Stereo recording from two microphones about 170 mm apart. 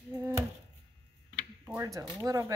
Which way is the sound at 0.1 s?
15° right (ahead or behind).